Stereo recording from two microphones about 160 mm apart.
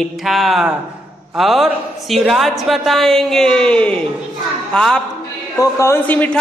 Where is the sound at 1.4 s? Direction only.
Centre (ahead or behind).